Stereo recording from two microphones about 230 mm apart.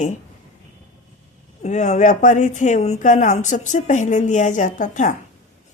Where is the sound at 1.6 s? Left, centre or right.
Left.